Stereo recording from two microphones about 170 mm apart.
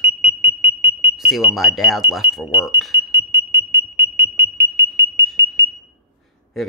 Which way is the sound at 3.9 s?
15° right (ahead or behind).